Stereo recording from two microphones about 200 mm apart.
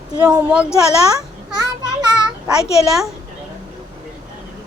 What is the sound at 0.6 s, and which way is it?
Speech, 15° left (ahead or behind).